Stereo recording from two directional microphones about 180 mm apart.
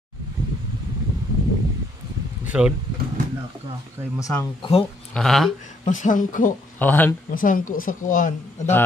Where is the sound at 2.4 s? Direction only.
5° right (ahead or behind).